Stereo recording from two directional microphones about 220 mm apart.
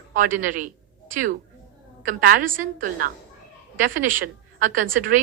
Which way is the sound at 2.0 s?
40° right (ahead or behind).